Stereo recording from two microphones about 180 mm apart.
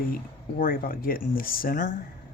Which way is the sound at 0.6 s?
50° left (ahead or behind).